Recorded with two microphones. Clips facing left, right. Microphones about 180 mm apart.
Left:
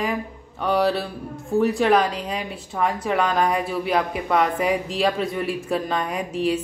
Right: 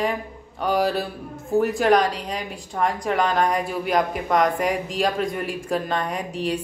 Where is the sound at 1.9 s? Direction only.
35° right (ahead or behind).